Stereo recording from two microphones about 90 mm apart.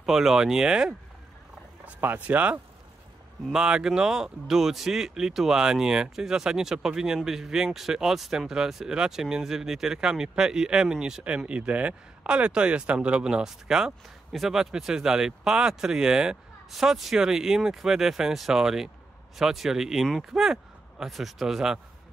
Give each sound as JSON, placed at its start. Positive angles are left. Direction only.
{"t": 0.0, "sound": "speech", "side_deg": -5}